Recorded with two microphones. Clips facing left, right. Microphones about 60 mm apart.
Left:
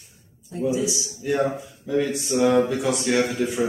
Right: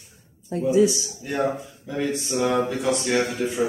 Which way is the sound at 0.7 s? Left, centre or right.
Right.